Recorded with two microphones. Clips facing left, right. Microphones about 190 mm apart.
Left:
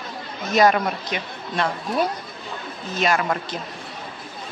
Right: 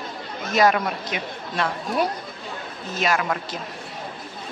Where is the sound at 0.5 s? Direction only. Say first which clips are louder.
Left 2 dB; 5° right (ahead or behind).